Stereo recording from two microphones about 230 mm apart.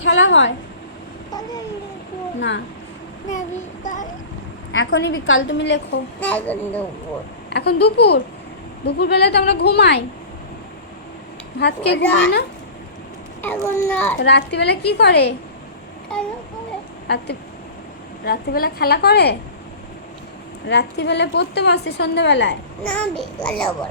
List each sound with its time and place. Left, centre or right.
0.0 s a woman's voice: left
1.3 s a child's voice: centre
3.8 s speech: left
4.7 s a woman's voice: left
6.1 s a child's voice: centre
7.5 s a woman's voice: left
11.6 s a woman's voice: left
12.0 s speech: centre
13.4 s a child's voice: centre
14.2 s a woman's voice: left
16.1 s speech: centre
18.3 s a woman's voice: left
20.7 s a woman's voice: left
22.8 s speech: centre